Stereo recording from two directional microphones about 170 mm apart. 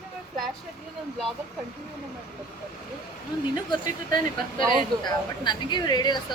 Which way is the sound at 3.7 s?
25° left (ahead or behind).